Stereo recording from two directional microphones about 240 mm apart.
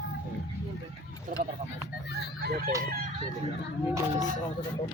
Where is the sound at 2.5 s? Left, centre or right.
Right.